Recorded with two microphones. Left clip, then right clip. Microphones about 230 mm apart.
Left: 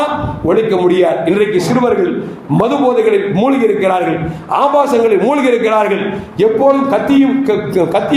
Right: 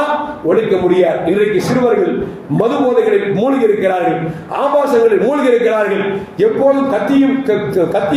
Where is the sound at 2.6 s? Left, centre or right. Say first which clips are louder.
Left 1 dB; left.